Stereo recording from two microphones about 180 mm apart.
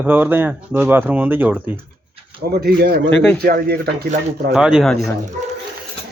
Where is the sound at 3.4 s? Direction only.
60° right (ahead or behind).